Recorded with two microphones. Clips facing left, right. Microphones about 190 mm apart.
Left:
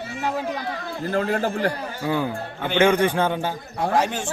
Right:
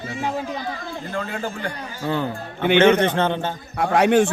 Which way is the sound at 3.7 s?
70° right (ahead or behind).